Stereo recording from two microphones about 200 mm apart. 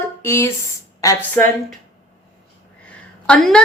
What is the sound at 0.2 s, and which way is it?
Speech, 10° left (ahead or behind).